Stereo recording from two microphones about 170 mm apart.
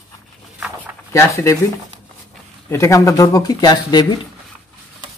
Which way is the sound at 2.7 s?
15° left (ahead or behind).